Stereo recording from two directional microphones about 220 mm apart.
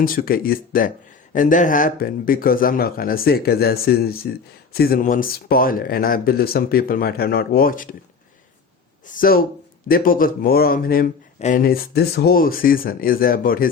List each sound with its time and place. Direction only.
0.0 s speech: 40° left (ahead or behind)
9.0 s speech: 40° left (ahead or behind)